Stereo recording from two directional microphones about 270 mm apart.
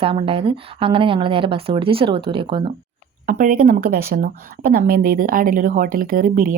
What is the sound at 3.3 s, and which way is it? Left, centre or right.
A woman's voice, right.